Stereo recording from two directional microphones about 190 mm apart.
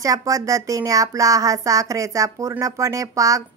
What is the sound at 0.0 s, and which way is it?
Speech, 15° right (ahead or behind).